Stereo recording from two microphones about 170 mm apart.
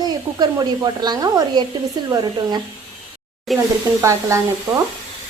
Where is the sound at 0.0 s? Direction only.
25° right (ahead or behind).